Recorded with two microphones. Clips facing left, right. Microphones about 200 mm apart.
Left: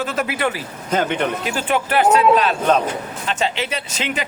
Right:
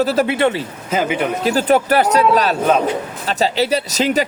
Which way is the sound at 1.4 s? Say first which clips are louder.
Right 7 dB; 40° right (ahead or behind).